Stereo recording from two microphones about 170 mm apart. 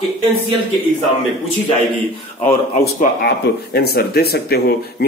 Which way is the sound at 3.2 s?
70° left (ahead or behind).